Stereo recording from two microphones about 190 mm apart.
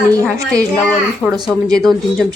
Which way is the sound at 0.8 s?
5° left (ahead or behind).